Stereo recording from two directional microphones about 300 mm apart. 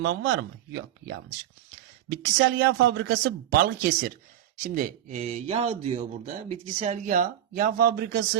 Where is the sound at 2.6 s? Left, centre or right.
Right.